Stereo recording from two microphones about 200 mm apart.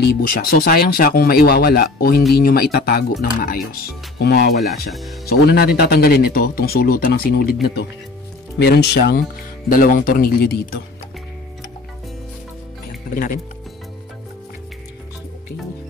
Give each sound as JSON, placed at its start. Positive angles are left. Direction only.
{"t": 0.0, "sound": "speech", "side_deg": 45}
{"t": 8.5, "sound": "speech", "side_deg": 55}